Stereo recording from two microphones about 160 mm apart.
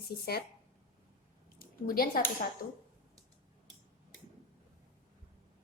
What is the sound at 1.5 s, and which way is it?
A woman's voice, 65° left (ahead or behind).